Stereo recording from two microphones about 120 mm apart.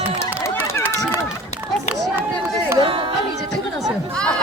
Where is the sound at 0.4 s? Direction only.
20° left (ahead or behind).